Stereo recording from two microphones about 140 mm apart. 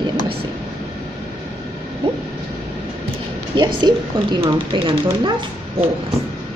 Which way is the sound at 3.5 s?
30° right (ahead or behind).